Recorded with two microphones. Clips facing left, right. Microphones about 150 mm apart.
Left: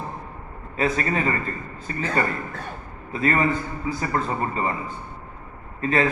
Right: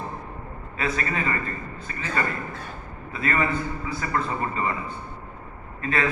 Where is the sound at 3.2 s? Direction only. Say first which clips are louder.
Left 3 dB; 35° left (ahead or behind).